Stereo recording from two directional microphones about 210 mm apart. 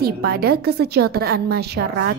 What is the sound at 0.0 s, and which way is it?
A woman's voice, 45° right (ahead or behind).